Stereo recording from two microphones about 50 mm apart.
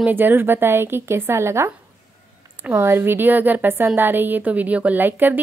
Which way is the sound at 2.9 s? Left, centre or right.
Right.